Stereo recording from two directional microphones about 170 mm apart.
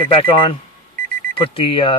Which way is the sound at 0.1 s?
30° left (ahead or behind).